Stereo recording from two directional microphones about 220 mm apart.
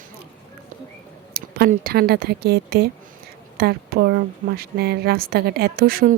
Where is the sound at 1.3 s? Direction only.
45° right (ahead or behind).